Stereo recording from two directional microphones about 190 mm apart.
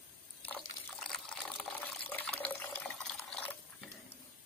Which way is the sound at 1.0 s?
5° left (ahead or behind).